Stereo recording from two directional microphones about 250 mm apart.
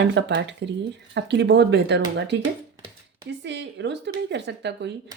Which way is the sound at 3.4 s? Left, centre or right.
Right.